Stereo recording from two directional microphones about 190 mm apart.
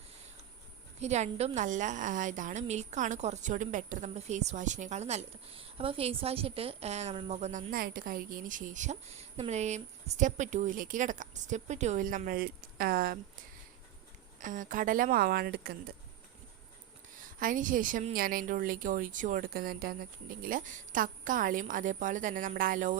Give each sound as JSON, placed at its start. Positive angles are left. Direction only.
{"t": 0.9, "sound": "a woman's voice", "side_deg": -35}
{"t": 7.7, "sound": "a woman's voice", "side_deg": -50}
{"t": 14.3, "sound": "a woman's voice", "side_deg": -45}
{"t": 17.4, "sound": "a woman's voice", "side_deg": -45}